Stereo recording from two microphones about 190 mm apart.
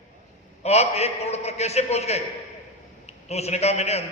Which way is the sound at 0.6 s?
35° left (ahead or behind).